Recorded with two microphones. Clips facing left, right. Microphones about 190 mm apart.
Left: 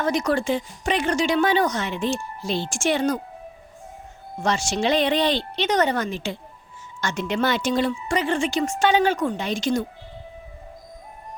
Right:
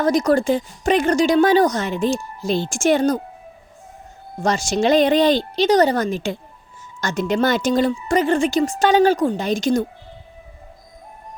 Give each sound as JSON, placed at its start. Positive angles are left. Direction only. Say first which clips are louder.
{"t": 0.0, "sound": "speech", "louder": "right 6 dB", "side_deg": -40}
{"t": 4.4, "sound": "speech", "louder": "right 4 dB", "side_deg": -40}